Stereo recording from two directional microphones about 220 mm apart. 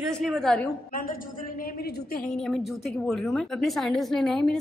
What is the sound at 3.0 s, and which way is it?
Speech, centre (ahead or behind).